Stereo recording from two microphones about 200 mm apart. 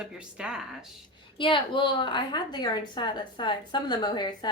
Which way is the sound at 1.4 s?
25° left (ahead or behind).